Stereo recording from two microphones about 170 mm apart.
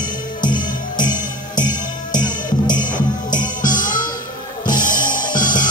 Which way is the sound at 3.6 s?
50° left (ahead or behind).